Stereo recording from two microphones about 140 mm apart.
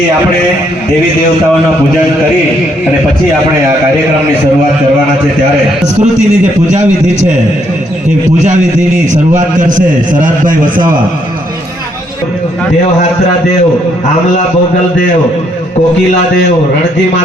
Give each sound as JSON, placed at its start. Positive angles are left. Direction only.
{"t": 6.0, "sound": "a man's voice", "side_deg": -60}
{"t": 9.3, "sound": "a man's voice", "side_deg": -65}